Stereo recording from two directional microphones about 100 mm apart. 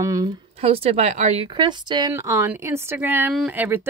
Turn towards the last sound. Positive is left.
turn(degrees=-20)  # may be behind; listen again after turning